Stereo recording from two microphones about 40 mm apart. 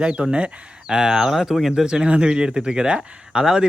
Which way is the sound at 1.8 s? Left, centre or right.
Right.